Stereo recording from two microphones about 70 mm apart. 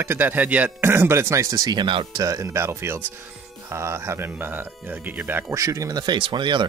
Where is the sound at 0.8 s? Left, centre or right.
Right.